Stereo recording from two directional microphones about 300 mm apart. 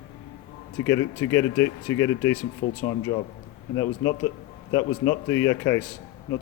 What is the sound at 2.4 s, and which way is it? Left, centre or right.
A man's voice, centre.